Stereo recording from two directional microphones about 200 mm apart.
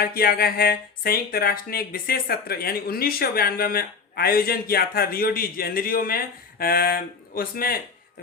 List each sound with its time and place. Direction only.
0.0 s speech: 50° left (ahead or behind)